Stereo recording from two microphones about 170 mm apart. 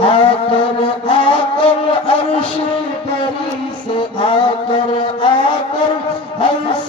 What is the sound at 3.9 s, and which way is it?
Music, 30° left (ahead or behind).